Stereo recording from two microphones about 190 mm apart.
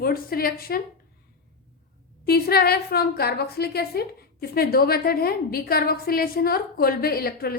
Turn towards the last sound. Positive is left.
turn(degrees=55)  # may be behind; listen again after turning